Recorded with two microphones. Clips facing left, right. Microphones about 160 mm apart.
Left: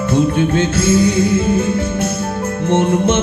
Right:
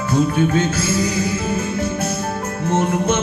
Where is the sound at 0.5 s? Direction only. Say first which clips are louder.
Left 5 dB; 30° left (ahead or behind).